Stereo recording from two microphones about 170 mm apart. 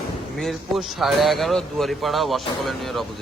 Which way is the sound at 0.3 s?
Centre (ahead or behind).